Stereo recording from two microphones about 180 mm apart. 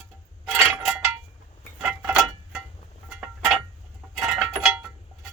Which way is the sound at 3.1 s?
5° right (ahead or behind).